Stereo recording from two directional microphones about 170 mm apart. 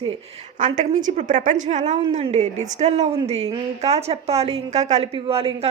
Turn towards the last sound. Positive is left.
turn(degrees=-35)  # may be behind; listen again after turning